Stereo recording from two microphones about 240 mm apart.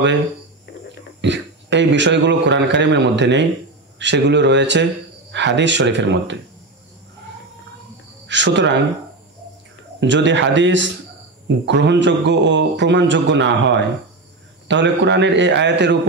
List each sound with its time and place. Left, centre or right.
1.2 s a man's voice: right
8.3 s a man's voice: right
9.9 s a man's voice: right